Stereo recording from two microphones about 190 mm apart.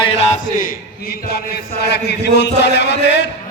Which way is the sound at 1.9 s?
65° left (ahead or behind).